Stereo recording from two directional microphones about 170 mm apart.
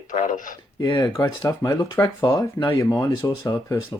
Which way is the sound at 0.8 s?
25° left (ahead or behind).